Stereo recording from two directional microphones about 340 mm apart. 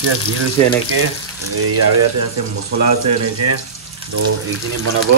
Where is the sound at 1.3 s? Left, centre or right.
Right.